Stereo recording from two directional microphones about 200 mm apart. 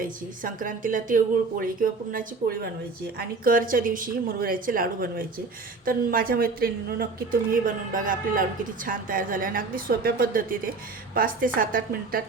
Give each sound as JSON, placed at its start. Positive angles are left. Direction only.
{"t": 0.0, "sound": "a woman's voice", "side_deg": -45}